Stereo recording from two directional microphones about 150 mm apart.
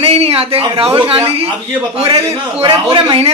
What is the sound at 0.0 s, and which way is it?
A man's voice, 40° right (ahead or behind).